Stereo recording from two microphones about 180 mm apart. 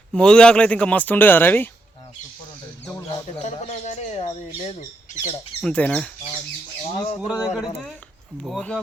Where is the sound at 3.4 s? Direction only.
40° left (ahead or behind).